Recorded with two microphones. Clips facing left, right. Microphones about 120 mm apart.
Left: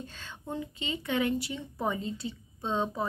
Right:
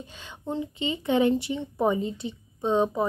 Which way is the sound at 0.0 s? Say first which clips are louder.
Right 4 dB; 15° right (ahead or behind).